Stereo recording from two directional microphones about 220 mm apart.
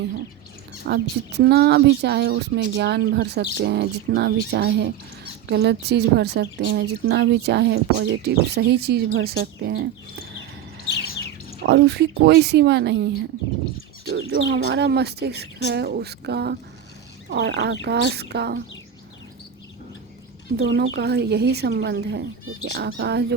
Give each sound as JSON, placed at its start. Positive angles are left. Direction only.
{"t": 0.9, "sound": "speech", "side_deg": -45}
{"t": 11.6, "sound": "speech", "side_deg": -50}
{"t": 14.3, "sound": "speech", "side_deg": -50}
{"t": 20.6, "sound": "speech", "side_deg": -50}